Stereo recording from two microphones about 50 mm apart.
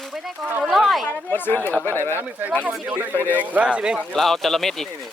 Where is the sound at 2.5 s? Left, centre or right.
Right.